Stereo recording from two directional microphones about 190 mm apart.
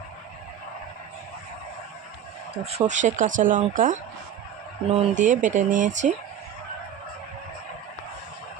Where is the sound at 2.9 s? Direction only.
40° right (ahead or behind).